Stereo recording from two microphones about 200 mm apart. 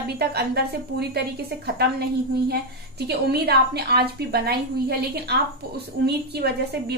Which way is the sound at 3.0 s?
55° right (ahead or behind).